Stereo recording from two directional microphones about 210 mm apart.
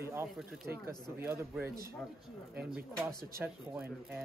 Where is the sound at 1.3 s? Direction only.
10° right (ahead or behind).